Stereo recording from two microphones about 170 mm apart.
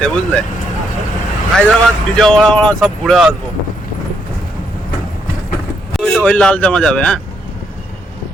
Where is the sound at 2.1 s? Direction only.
5° left (ahead or behind).